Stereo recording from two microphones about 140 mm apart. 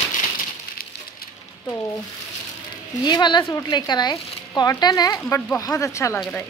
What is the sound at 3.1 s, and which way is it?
Speech, 30° left (ahead or behind).